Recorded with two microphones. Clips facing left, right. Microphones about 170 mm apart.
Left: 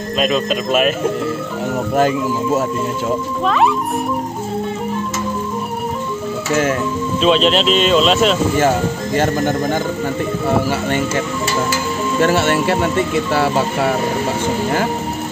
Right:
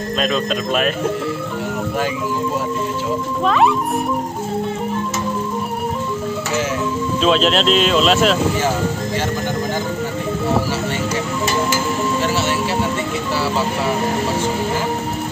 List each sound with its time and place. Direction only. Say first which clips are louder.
0.2 s speech: left 3 dB; 5° left (ahead or behind)
2.0 s speech: left 7 dB; 45° left (ahead or behind)
3.4 s speech: even; centre (ahead or behind)
7.2 s speech: left 2 dB; centre (ahead or behind)
9.1 s speech: left 5 dB; 50° left (ahead or behind)
12.2 s speech: left 5 dB; 55° left (ahead or behind)